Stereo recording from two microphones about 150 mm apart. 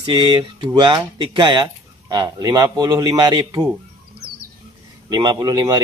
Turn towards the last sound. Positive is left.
turn(degrees=-25)  # may be behind; listen again after turning